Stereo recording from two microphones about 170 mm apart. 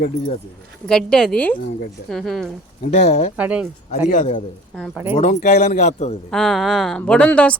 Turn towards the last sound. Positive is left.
turn(degrees=5)  # may be behind; listen again after turning